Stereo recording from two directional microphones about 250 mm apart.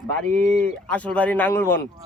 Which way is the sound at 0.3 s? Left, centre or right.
Right.